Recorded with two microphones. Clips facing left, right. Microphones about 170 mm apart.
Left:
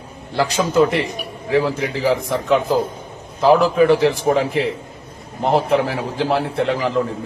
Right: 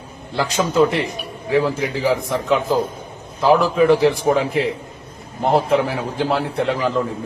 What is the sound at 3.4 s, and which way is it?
Speech, 40° left (ahead or behind).